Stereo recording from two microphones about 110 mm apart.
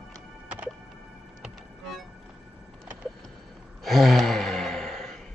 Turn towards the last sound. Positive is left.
turn(degrees=5)  # may be behind; listen again after turning